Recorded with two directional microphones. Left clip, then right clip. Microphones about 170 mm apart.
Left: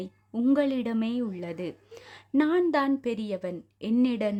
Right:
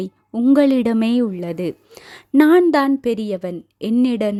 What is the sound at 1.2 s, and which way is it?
A woman's voice, 30° right (ahead or behind).